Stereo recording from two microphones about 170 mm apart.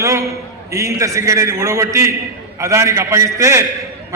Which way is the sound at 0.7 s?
20° right (ahead or behind).